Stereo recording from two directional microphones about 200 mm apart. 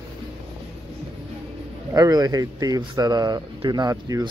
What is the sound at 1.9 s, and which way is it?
Speech, 20° right (ahead or behind).